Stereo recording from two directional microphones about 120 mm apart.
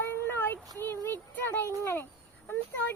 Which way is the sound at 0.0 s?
20° left (ahead or behind).